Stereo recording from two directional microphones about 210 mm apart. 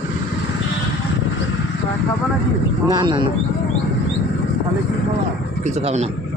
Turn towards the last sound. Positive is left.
turn(degrees=-30)  # may be behind; listen again after turning